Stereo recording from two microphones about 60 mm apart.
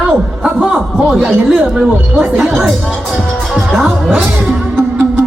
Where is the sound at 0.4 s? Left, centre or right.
Centre.